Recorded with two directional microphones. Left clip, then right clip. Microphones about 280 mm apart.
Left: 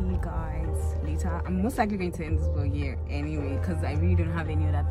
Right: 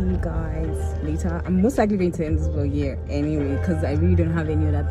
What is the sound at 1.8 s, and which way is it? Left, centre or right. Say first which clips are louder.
A woman's voice: right 9 dB; right.